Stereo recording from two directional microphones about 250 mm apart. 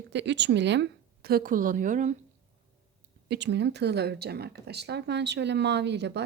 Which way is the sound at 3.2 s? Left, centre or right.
Right.